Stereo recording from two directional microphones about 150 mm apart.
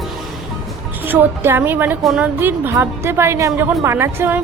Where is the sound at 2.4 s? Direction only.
15° right (ahead or behind).